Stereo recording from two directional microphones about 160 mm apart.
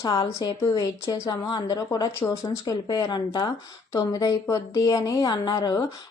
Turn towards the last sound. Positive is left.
turn(degrees=25)  # may be behind; listen again after turning